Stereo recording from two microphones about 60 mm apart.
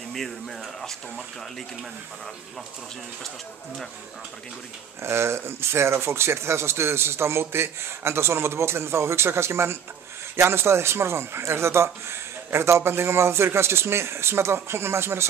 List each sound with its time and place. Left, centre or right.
0.1 s speech: centre
5.0 s speech: right